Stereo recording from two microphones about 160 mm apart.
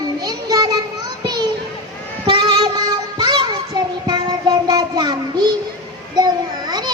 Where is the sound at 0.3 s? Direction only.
25° right (ahead or behind).